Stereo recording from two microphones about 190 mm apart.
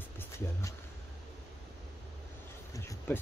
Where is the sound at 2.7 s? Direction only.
15° left (ahead or behind).